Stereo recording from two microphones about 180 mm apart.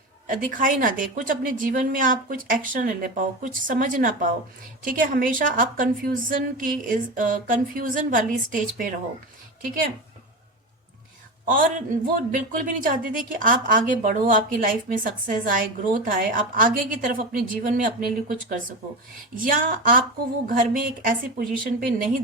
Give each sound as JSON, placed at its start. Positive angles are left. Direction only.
{"t": 0.3, "sound": "a woman's voice", "side_deg": -50}
{"t": 11.4, "sound": "a woman's voice", "side_deg": -50}